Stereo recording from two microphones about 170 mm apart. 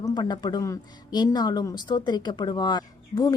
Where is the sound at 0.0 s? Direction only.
25° left (ahead or behind).